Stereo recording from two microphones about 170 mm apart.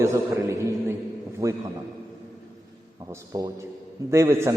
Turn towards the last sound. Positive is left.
turn(degrees=-15)  # may be behind; listen again after turning